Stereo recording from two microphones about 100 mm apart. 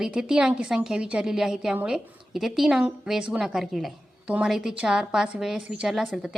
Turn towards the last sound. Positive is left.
turn(degrees=-5)  # may be behind; listen again after turning